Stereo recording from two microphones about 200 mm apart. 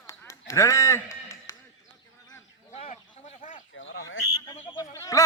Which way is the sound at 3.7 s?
75° left (ahead or behind).